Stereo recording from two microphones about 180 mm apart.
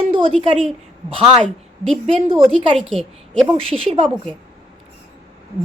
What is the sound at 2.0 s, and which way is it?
Speech, 30° right (ahead or behind).